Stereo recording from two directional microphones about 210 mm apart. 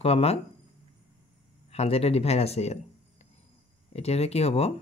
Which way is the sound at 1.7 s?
30° left (ahead or behind).